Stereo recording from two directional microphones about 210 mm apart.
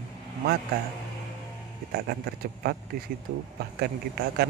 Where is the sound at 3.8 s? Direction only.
50° right (ahead or behind).